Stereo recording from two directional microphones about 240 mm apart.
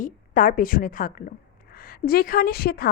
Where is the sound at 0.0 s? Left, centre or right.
Left.